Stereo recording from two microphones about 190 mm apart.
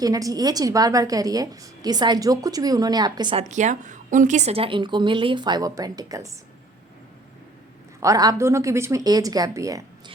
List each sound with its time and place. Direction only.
0.0 s a woman's voice: 20° right (ahead or behind)
3.5 s a woman's voice: 40° right (ahead or behind); by 6.3 s 20° right (ahead or behind)
8.0 s a woman's voice: 20° right (ahead or behind)